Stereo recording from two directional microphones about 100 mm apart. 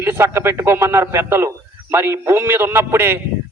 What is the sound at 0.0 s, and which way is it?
A man's voice, 25° right (ahead or behind).